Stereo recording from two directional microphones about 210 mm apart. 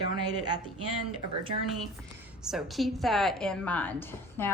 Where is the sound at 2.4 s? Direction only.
Centre (ahead or behind).